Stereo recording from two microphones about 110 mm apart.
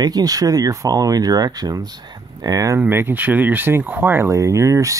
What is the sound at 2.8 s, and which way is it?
Speech, 20° right (ahead or behind).